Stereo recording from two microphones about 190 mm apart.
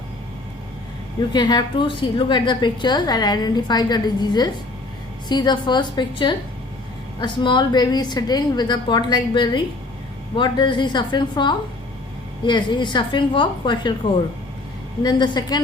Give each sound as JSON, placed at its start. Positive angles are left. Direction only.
{"t": 1.3, "sound": "a woman's voice", "side_deg": 20}
{"t": 15.0, "sound": "a woman's voice", "side_deg": 25}